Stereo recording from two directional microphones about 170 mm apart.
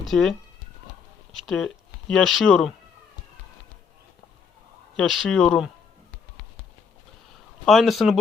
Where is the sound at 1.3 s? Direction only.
Centre (ahead or behind).